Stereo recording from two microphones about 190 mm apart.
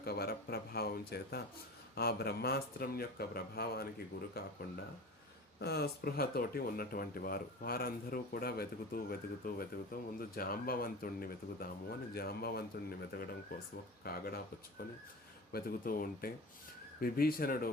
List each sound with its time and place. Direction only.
0.0 s speech: 55° left (ahead or behind)
5.5 s speech: 60° left (ahead or behind)